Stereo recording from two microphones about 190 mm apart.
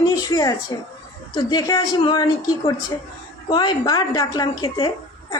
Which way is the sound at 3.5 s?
20° left (ahead or behind).